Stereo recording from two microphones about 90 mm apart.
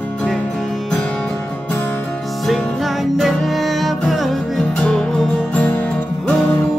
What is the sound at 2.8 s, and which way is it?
Music, centre (ahead or behind).